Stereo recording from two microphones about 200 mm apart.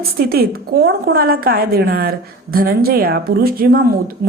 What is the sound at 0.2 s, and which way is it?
Speech, 50° right (ahead or behind).